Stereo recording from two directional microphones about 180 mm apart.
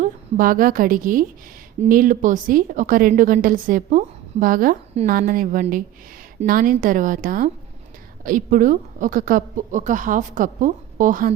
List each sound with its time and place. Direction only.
0.0 s a woman's voice: 50° right (ahead or behind)